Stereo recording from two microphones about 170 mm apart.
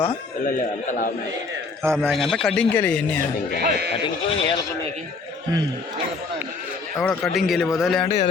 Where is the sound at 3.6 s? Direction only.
70° right (ahead or behind).